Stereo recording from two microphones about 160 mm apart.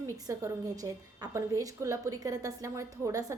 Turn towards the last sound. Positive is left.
turn(degrees=-20)  # may be behind; listen again after turning